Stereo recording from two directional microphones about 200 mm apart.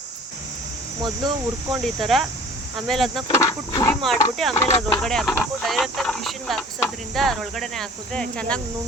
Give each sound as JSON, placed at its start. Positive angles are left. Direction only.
{"t": 1.7, "sound": "speech", "side_deg": 0}
{"t": 3.3, "sound": "speech", "side_deg": 15}
{"t": 4.0, "sound": "speech", "side_deg": 0}
{"t": 4.5, "sound": "speech", "side_deg": 10}